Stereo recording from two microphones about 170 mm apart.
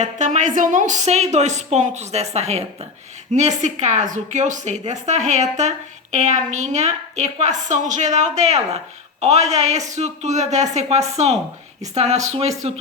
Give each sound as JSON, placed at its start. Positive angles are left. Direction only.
{"t": 0.0, "sound": "a woman's voice", "side_deg": -45}